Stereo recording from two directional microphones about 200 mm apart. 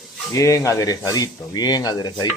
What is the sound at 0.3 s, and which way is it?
Speech, 15° left (ahead or behind).